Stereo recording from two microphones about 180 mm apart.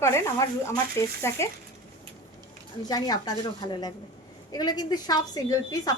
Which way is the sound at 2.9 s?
20° left (ahead or behind).